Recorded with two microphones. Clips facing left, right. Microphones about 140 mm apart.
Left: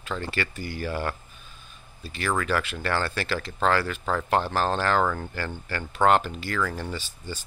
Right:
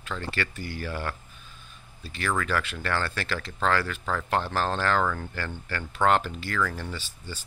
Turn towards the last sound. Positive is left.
turn(degrees=15)  # may be behind; listen again after turning